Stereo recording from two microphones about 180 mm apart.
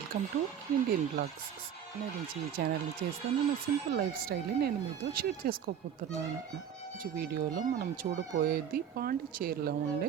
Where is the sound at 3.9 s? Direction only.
55° right (ahead or behind).